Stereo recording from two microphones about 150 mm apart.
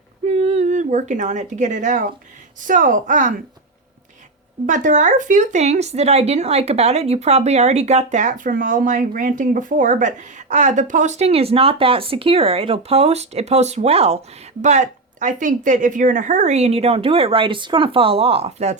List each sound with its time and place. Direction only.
0.3 s speech: 45° right (ahead or behind)
4.6 s speech: 60° right (ahead or behind); by 14.2 s 45° right (ahead or behind)
14.6 s speech: 55° right (ahead or behind)